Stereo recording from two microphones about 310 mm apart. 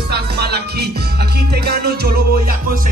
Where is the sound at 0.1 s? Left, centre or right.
Right.